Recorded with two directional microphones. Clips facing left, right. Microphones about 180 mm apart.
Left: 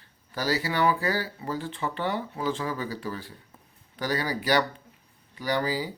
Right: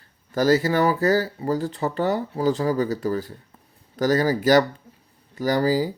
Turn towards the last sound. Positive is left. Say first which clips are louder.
# right 7 dB
turn(degrees=-40)  # may be behind; listen again after turning